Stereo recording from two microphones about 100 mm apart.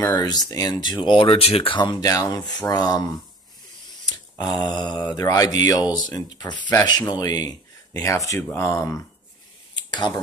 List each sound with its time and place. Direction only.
0.0 s speech: 40° left (ahead or behind)
2.0 s speech: 35° left (ahead or behind)
4.4 s speech: 40° left (ahead or behind)
9.8 s a sound: 50° left (ahead or behind)